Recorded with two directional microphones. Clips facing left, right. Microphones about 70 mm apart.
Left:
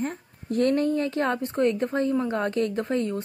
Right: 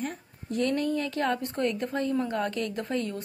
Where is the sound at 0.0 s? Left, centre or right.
Left.